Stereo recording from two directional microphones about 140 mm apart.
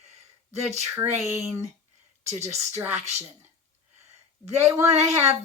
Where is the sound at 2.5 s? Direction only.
50° right (ahead or behind).